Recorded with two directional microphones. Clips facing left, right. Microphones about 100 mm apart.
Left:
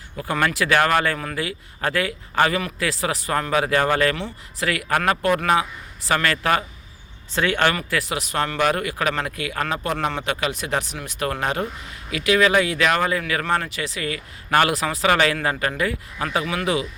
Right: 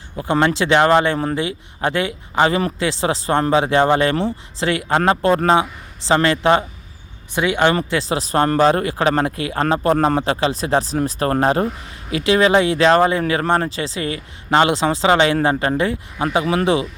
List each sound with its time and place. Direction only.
0.2 s speech: 25° right (ahead or behind)